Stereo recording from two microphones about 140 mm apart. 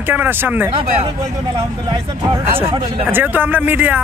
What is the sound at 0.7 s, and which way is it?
Speech, 40° right (ahead or behind).